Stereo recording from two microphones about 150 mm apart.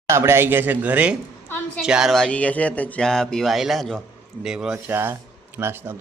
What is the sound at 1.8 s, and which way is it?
Speech, 5° right (ahead or behind).